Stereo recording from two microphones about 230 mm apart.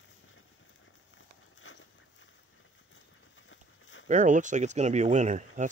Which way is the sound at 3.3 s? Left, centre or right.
Left.